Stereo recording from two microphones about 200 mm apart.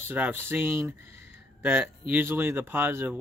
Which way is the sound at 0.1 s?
10° right (ahead or behind).